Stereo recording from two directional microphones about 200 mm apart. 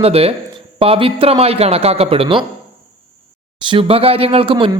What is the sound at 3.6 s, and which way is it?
A man's voice, 25° right (ahead or behind).